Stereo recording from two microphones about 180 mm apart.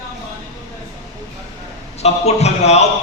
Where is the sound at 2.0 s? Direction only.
35° left (ahead or behind).